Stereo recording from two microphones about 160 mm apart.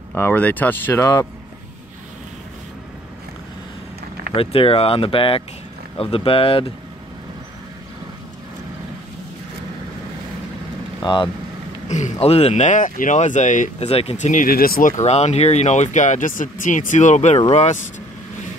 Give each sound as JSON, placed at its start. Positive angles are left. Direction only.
{"t": 0.1, "sound": "speech", "side_deg": 10}
{"t": 4.4, "sound": "speech", "side_deg": 35}
{"t": 11.0, "sound": "speech", "side_deg": 30}
{"t": 11.9, "sound": "speech", "side_deg": 45}